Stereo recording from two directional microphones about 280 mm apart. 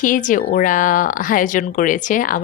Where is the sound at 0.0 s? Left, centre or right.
Left.